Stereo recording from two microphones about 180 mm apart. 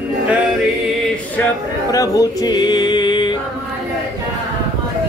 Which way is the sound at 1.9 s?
20° left (ahead or behind).